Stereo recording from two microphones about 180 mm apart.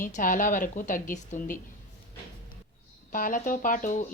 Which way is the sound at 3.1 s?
50° left (ahead or behind).